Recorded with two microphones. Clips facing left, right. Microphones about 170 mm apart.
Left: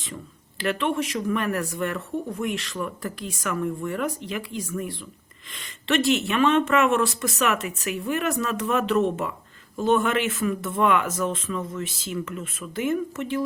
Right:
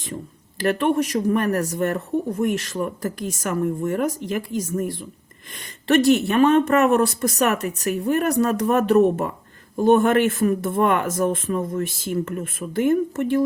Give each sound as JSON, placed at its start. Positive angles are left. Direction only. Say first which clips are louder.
{"t": 0.6, "sound": "speech", "louder": "right 5 dB", "side_deg": -45}